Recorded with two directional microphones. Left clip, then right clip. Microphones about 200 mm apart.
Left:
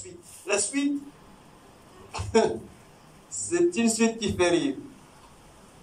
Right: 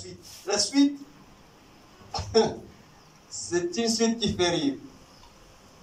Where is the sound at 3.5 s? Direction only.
25° right (ahead or behind).